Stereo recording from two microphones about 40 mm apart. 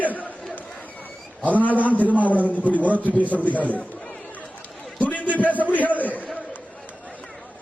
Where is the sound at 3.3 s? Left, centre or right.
Right.